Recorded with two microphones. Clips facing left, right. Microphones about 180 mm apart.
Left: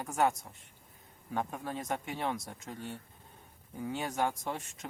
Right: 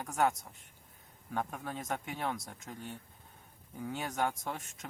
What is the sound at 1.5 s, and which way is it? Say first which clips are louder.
Speech: left 2 dB; 10° left (ahead or behind).